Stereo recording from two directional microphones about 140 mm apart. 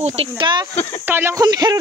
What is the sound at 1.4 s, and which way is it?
Speech, 30° right (ahead or behind).